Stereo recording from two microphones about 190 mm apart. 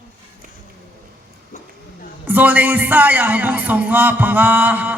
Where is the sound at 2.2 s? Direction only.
10° right (ahead or behind).